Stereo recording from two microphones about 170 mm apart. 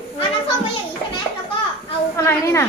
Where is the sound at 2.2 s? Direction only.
15° left (ahead or behind).